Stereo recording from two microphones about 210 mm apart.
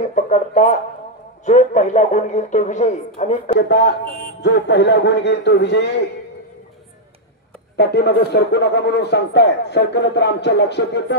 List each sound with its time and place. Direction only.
0.0 s a sound: 35° left (ahead or behind)
1.4 s speech: 35° left (ahead or behind)
3.5 s speech: 55° left (ahead or behind)
7.7 s speech: 50° left (ahead or behind)